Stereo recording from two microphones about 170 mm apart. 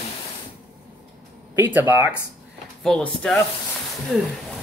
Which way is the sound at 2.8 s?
5° left (ahead or behind).